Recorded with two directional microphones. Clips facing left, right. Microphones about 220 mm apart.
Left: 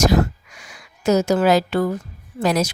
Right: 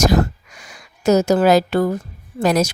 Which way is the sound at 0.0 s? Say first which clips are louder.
Right 1 dB; 45° right (ahead or behind).